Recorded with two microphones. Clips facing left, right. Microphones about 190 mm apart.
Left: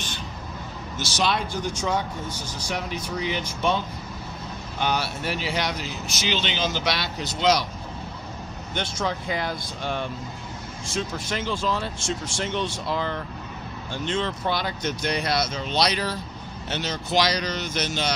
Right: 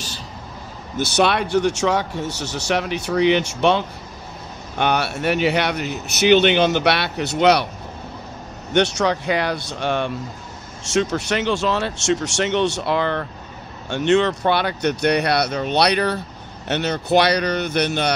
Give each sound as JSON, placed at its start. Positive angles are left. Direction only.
{"t": 0.9, "sound": "speech", "side_deg": -65}
{"t": 4.7, "sound": "speech", "side_deg": -65}
{"t": 8.7, "sound": "speech", "side_deg": -75}